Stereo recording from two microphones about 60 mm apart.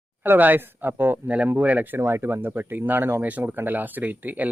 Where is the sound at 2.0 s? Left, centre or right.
Right.